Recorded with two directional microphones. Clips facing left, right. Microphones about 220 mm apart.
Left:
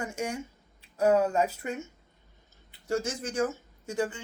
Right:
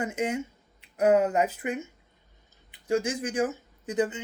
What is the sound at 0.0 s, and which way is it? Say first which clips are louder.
A woman's voice: right 4 dB; 20° right (ahead or behind).